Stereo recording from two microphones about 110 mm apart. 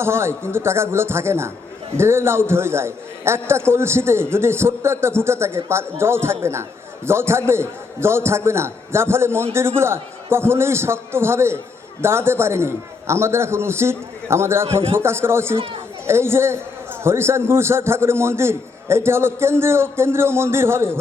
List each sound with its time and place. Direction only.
0.0 s a man's voice: 25° right (ahead or behind)
15.5 s speech: 55° right (ahead or behind)
16.0 s a man's voice: 25° right (ahead or behind)